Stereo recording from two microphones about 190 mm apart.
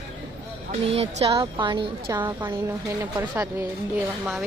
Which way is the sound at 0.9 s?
30° right (ahead or behind).